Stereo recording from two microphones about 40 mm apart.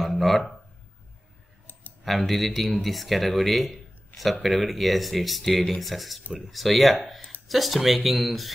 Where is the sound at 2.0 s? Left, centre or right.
Centre.